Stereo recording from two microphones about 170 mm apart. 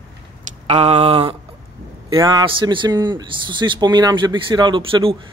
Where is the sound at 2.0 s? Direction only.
20° right (ahead or behind).